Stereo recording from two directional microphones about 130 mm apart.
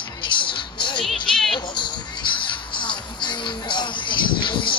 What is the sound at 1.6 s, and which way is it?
Music, 35° left (ahead or behind).